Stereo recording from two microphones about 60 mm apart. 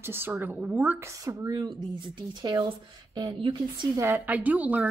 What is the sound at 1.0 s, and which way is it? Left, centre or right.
Speech, right.